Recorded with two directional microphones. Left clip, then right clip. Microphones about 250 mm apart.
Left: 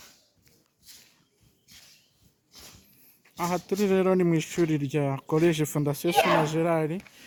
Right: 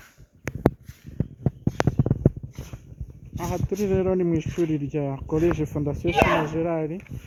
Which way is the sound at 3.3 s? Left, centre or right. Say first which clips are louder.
Left 1 dB; centre.